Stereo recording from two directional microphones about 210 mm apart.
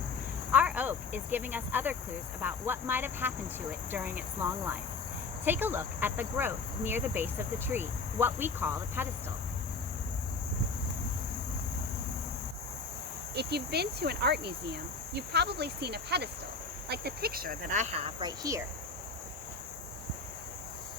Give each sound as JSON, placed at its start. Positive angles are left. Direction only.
{"t": 0.5, "sound": "a sound", "side_deg": -5}
{"t": 2.4, "sound": "speech", "side_deg": -10}
{"t": 13.3, "sound": "speech", "side_deg": -50}